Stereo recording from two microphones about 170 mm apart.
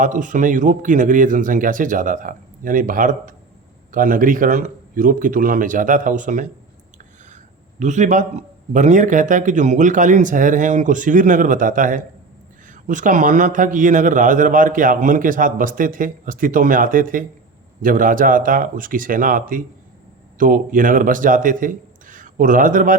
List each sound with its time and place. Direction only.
0.0 s a man's voice: 50° right (ahead or behind)
7.8 s a man's voice: 45° right (ahead or behind)